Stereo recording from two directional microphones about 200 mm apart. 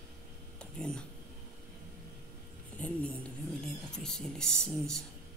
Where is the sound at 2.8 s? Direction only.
5° left (ahead or behind).